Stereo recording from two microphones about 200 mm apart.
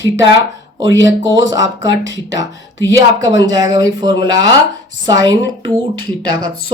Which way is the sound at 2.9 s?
20° right (ahead or behind).